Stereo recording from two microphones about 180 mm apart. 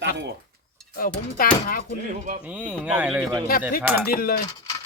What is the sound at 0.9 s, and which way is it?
Speech, 55° left (ahead or behind).